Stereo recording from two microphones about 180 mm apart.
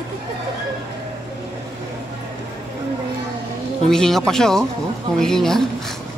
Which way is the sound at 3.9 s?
5° left (ahead or behind).